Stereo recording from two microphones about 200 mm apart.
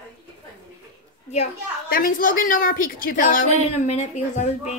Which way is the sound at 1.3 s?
40° left (ahead or behind).